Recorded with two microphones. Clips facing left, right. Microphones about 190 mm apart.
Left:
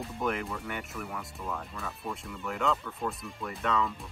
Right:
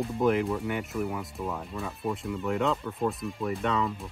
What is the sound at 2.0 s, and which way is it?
Speech, centre (ahead or behind).